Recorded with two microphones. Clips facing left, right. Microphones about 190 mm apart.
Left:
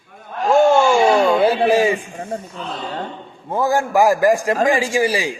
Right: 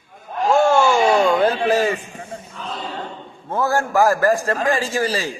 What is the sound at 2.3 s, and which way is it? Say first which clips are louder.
Speech: left 8 dB; 45° left (ahead or behind).